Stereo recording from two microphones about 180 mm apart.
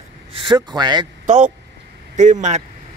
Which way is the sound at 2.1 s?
40° right (ahead or behind).